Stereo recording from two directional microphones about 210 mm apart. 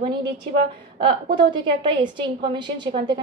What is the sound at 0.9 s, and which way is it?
A woman's voice, 25° right (ahead or behind).